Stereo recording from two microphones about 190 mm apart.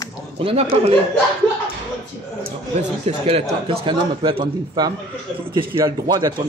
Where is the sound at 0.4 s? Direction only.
30° right (ahead or behind).